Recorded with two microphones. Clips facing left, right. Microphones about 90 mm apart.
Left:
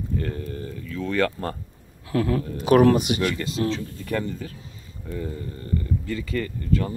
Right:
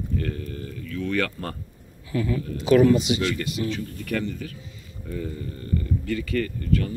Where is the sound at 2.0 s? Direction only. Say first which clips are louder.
Left 3 dB; 65° left (ahead or behind).